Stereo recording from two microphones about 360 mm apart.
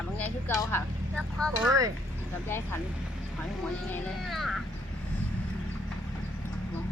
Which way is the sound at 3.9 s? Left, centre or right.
Centre.